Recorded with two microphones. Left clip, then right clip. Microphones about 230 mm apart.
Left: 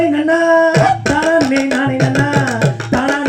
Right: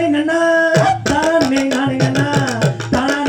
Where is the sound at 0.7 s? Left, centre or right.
Left.